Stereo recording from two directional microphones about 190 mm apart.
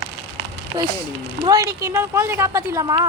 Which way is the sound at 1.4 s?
20° right (ahead or behind).